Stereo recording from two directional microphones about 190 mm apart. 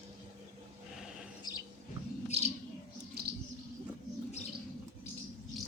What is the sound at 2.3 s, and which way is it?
Bird, 30° right (ahead or behind).